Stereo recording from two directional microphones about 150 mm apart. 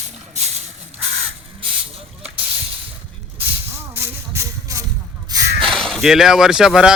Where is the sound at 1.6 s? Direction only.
40° right (ahead or behind).